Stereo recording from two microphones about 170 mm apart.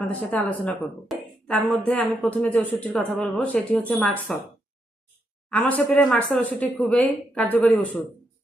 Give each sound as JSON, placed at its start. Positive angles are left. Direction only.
{"t": 0.0, "sound": "speech", "side_deg": 10}
{"t": 5.5, "sound": "speech", "side_deg": 10}